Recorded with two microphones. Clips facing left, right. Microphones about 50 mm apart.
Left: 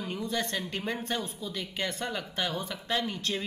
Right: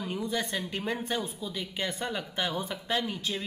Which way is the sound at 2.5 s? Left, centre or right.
Right.